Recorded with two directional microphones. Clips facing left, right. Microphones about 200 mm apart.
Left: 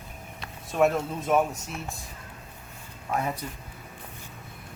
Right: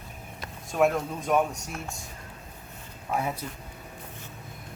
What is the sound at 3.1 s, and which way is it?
Speech, 5° right (ahead or behind).